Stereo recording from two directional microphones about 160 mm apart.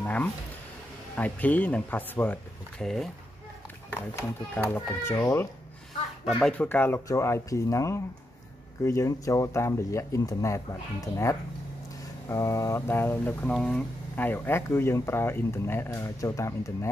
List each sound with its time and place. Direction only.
0.0 s a sound: 10° left (ahead or behind)
1.1 s speech: 10° left (ahead or behind)
3.9 s speech: 15° left (ahead or behind)
6.2 s speech: 5° left (ahead or behind)